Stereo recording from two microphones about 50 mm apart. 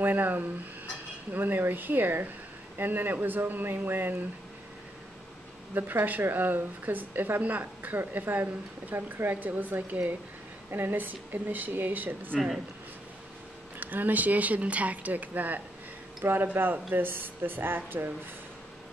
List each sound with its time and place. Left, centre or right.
0.0 s speech: right
5.8 s speech: right
13.7 s speech: right